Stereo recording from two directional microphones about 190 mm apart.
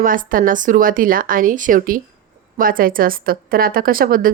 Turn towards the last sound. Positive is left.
turn(degrees=-50)  # may be behind; listen again after turning